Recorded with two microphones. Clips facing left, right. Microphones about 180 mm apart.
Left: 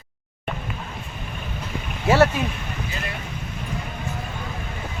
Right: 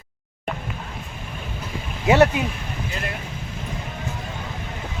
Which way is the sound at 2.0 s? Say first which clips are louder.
Right 1 dB; 20° right (ahead or behind).